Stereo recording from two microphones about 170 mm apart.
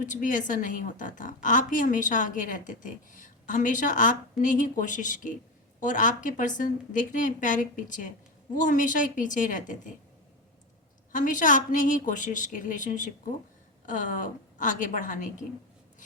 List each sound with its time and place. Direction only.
0.0 s a woman's voice: 50° left (ahead or behind)
11.1 s a woman's voice: 50° left (ahead or behind)